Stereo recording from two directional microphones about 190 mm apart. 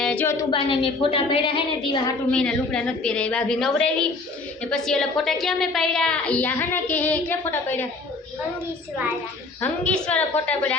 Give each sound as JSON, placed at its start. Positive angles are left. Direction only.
{"t": 0.0, "sound": "a woman's voice", "side_deg": 5}
{"t": 0.5, "sound": "a woman's voice", "side_deg": 25}
{"t": 2.3, "sound": "a woman's voice", "side_deg": 5}
{"t": 9.6, "sound": "a woman's voice", "side_deg": 5}